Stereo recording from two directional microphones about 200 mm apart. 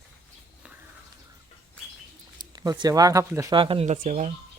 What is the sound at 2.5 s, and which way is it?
Speech, 20° right (ahead or behind).